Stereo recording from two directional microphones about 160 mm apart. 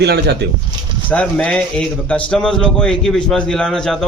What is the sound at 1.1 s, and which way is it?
A man's voice, 10° left (ahead or behind).